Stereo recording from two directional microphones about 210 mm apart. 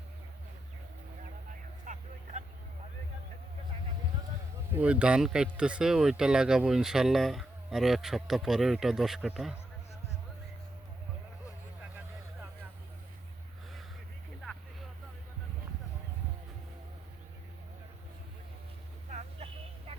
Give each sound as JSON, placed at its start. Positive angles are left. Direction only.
{"t": 1.8, "sound": "vehicle", "side_deg": -35}
{"t": 4.7, "sound": "speech", "side_deg": -5}
{"t": 19.1, "sound": "vehicle", "side_deg": -35}